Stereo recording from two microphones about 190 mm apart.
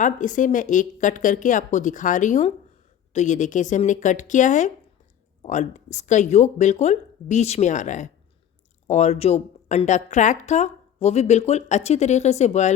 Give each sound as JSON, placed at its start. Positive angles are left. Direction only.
{"t": 0.0, "sound": "a woman's voice", "side_deg": 40}